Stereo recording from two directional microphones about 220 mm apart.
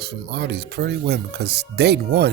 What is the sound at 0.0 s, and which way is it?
Speech, 50° right (ahead or behind).